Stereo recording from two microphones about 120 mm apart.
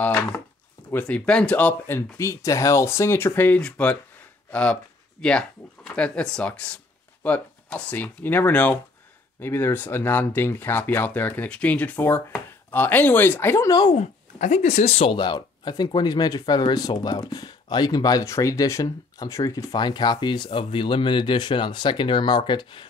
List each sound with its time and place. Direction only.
0.0 s speech: 15° left (ahead or behind)
13.9 s speech: 70° left (ahead or behind)
15.1 s speech: 35° left (ahead or behind)